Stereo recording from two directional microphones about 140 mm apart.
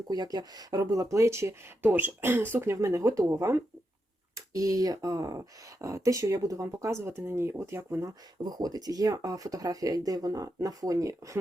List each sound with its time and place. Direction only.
0.1 s speech: 30° right (ahead or behind)